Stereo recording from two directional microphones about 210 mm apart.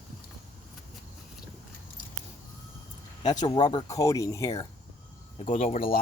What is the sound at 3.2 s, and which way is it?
Speech, 20° left (ahead or behind).